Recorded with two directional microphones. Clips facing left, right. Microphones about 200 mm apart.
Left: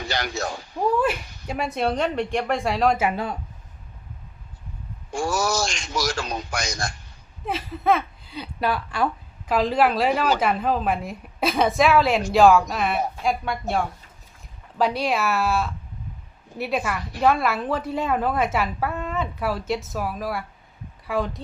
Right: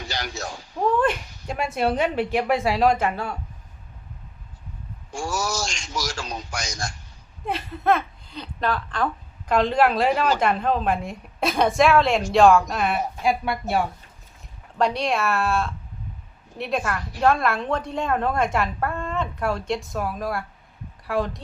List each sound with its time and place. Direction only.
0.1 s speech: 60° left (ahead or behind)
0.8 s a woman's voice: 5° left (ahead or behind)
5.1 s a man's voice: 60° left (ahead or behind)
7.4 s a woman's voice: centre (ahead or behind)